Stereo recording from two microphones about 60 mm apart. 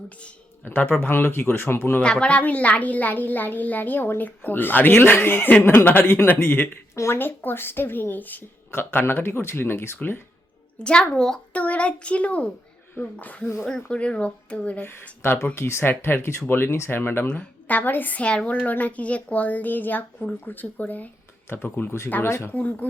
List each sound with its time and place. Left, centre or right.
0.6 s a woman's voice: left
2.0 s a woman's voice: centre
6.3 s a woman's voice: left
6.9 s speech: left
7.2 s a woman's voice: left
10.8 s a woman's voice: centre
11.5 s a woman's voice: left
13.7 s a woman's voice: centre
15.2 s a woman's voice: left
17.2 s a woman's voice: left
22.5 s a woman's voice: left